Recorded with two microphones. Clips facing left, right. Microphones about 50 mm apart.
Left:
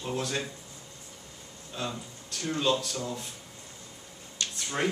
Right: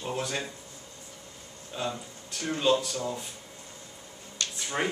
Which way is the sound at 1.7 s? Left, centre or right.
Centre.